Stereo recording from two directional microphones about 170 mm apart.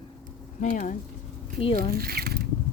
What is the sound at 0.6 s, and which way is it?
Speech, 50° left (ahead or behind).